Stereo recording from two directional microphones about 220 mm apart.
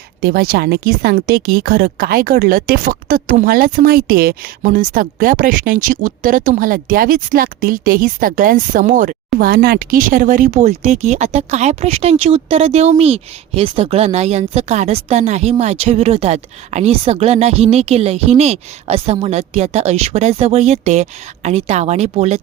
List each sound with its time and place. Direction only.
0.2 s speech: 45° right (ahead or behind)